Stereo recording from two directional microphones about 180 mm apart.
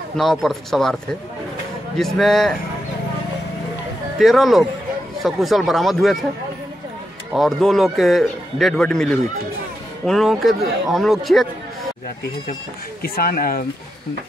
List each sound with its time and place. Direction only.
0.2 s speech: centre (ahead or behind)
2.0 s speech: centre (ahead or behind)
4.2 s speech: centre (ahead or behind)
7.3 s speech: centre (ahead or behind)
13.0 s speech: 55° left (ahead or behind)